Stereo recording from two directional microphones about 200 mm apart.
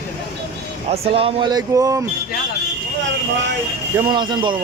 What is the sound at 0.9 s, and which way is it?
Speech, 30° right (ahead or behind).